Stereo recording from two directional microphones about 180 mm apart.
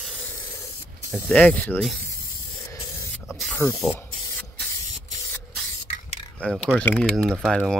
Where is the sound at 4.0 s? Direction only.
10° left (ahead or behind).